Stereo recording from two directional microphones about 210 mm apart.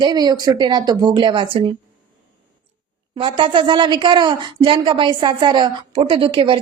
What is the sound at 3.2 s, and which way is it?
Speech, 25° right (ahead or behind).